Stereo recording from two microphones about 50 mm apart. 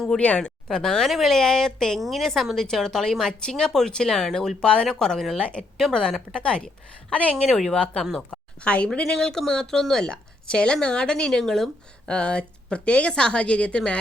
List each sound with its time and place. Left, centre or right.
0.2 s a woman's voice: left; by 4.5 s centre
4.6 s a woman's voice: centre
5.7 s a woman's voice: centre
6.0 s a woman's voice: centre
7.4 s a woman's voice: centre
12.1 s a woman's voice: left